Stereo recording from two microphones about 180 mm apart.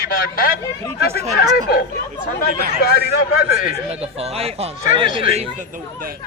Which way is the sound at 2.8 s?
60° left (ahead or behind).